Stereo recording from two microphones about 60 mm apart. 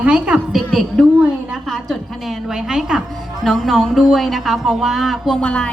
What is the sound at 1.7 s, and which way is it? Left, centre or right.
Speech, centre.